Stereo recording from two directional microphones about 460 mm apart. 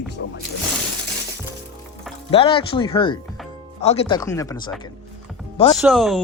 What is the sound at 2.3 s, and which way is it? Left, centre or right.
Speech, centre.